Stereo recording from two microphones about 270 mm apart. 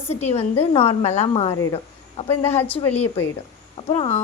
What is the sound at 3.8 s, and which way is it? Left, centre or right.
Speech, centre.